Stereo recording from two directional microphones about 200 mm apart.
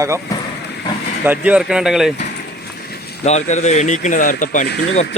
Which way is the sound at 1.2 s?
10° right (ahead or behind).